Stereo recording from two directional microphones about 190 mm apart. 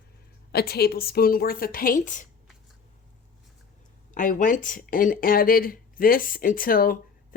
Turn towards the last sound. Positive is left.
turn(degrees=50)  # may be behind; listen again after turning